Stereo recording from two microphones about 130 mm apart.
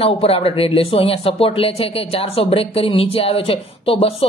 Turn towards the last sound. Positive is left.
turn(degrees=45)  # may be behind; listen again after turning